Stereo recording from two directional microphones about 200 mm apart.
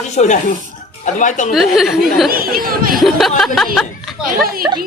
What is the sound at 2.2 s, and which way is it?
Speech, 45° right (ahead or behind).